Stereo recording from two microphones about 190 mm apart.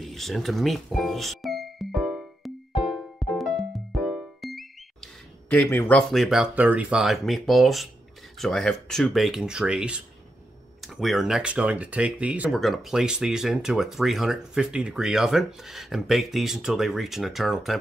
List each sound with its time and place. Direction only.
0.0 s music: centre (ahead or behind)
5.7 s speech: 10° left (ahead or behind)